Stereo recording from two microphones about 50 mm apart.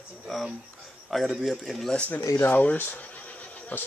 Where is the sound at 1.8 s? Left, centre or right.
Left.